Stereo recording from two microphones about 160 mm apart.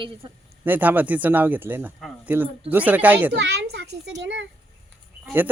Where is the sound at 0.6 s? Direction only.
10° right (ahead or behind).